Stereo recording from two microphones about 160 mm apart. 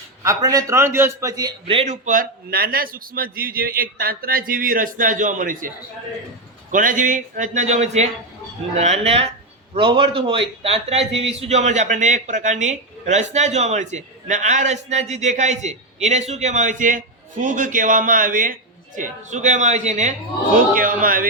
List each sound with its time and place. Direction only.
0.2 s a man's voice: 20° right (ahead or behind); by 20.1 s 45° right (ahead or behind)
21.0 s a man's voice: 60° right (ahead or behind)